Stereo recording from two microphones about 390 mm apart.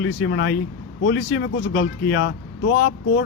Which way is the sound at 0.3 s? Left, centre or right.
Left.